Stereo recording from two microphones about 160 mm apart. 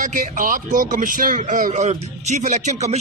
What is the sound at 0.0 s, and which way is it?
Speech, 50° right (ahead or behind).